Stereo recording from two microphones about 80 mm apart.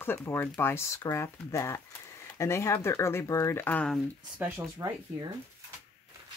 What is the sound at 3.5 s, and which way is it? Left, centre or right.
Speech, left.